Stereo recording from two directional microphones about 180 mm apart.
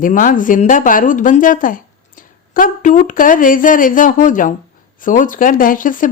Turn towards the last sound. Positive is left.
turn(degrees=50)  # may be behind; listen again after turning